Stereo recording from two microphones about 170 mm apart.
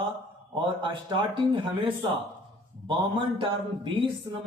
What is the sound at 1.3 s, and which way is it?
A man's voice, 30° right (ahead or behind).